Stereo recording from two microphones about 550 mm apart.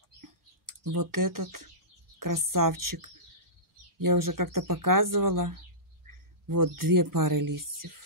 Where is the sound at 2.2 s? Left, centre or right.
Right.